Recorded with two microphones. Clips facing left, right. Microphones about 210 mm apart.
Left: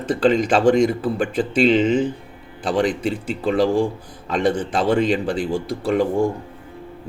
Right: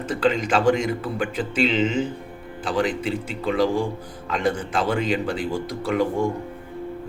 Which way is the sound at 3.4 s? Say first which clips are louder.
Left 4 dB; 35° left (ahead or behind).